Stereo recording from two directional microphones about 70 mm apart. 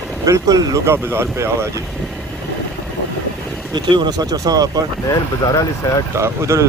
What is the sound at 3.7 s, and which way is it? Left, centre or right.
Speech, right.